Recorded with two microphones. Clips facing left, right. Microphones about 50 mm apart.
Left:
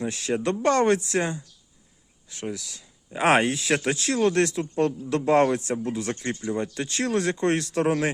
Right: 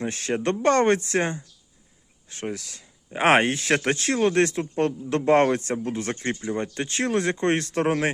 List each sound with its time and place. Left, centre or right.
0.0 s speech: right